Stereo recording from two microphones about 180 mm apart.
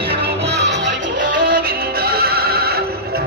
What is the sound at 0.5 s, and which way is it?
Music, 75° right (ahead or behind).